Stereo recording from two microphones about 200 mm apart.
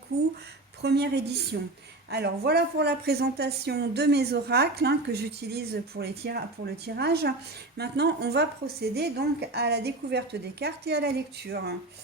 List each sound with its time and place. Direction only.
0.1 s a woman's voice: 55° right (ahead or behind)